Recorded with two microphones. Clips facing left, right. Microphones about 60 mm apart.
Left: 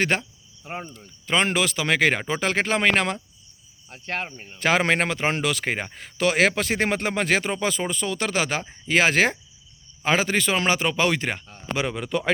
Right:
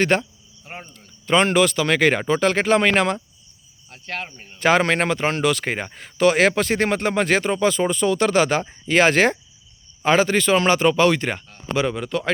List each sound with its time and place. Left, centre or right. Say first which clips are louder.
0.0 s speech: right 4 dB; centre
3.8 s speech: left 1 dB; left
4.4 s a man's voice: right 5 dB; centre
11.4 s speech: right 4 dB; centre
11.9 s speech: right 2 dB; centre